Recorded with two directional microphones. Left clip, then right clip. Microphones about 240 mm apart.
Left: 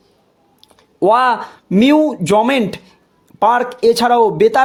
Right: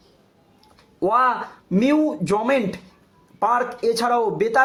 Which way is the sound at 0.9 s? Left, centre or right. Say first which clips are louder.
Left 6 dB; left.